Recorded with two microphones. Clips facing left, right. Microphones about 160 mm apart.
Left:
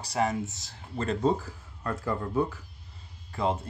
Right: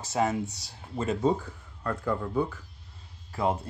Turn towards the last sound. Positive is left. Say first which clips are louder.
# right 1 dB
turn(degrees=-5)  # may be behind; listen again after turning